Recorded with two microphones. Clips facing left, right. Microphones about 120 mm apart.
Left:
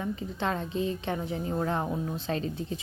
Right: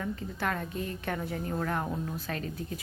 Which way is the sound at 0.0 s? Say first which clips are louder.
Left 2 dB; 20° left (ahead or behind).